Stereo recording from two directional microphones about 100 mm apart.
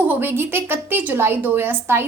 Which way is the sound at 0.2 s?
20° right (ahead or behind).